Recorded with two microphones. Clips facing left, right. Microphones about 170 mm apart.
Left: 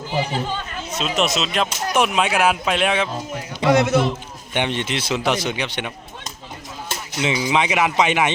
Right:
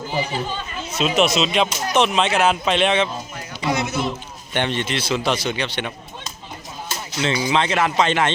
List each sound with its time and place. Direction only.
0.9 s speech: centre (ahead or behind)
3.6 s speech: 90° left
4.5 s speech: 15° left (ahead or behind)
7.2 s speech: 10° left (ahead or behind)